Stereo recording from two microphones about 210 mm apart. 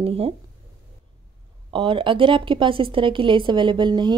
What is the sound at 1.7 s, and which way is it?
A woman's voice, 25° right (ahead or behind).